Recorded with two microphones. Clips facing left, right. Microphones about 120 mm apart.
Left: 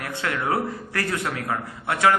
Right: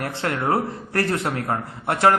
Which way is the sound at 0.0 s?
30° right (ahead or behind).